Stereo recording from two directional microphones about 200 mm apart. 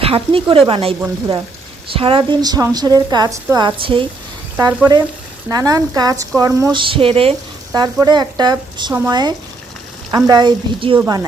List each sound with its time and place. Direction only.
0.0 s speech: 30° right (ahead or behind)
4.5 s speech: 15° right (ahead or behind)
10.9 s speech: 10° right (ahead or behind)